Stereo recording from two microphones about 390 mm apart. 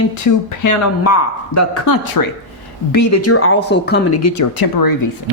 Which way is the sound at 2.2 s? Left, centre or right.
Left.